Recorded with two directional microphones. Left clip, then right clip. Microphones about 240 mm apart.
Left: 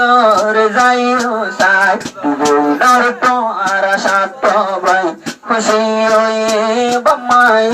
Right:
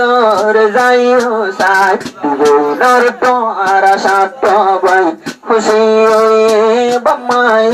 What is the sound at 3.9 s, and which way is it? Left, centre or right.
Speech, right.